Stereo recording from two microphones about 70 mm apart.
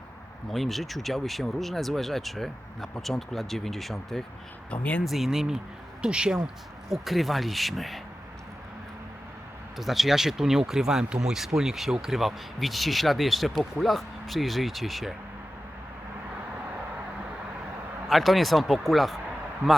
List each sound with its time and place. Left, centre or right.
0.5 s speech: centre
4.7 s speech: left
5.0 s speech: centre
6.8 s speech: centre
9.7 s speech: centre
18.1 s speech: centre